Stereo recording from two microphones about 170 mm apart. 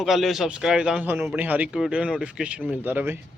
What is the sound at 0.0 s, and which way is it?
A man's voice, centre (ahead or behind).